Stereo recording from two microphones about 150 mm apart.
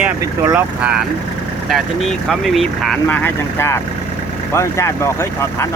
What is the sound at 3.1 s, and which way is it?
Speech, 15° left (ahead or behind).